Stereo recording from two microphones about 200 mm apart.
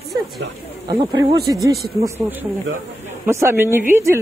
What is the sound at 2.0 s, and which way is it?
Speech, 10° right (ahead or behind).